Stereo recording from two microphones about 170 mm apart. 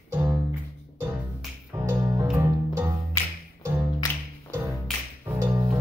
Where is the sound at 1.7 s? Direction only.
20° right (ahead or behind).